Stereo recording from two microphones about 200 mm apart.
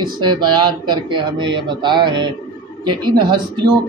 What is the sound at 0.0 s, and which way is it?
A man's voice, 20° right (ahead or behind).